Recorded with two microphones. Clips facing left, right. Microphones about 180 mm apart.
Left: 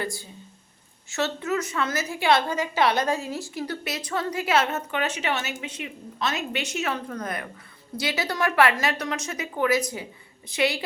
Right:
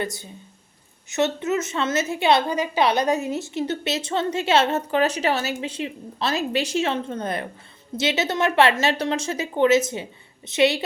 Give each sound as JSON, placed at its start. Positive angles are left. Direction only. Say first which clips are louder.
{"t": 0.0, "sound": "a woman's voice", "louder": "right 3 dB", "side_deg": -20}